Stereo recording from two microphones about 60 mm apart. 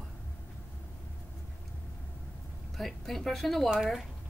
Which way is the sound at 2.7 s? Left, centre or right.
Centre.